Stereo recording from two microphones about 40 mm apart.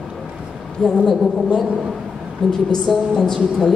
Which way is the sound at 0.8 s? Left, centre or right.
Centre.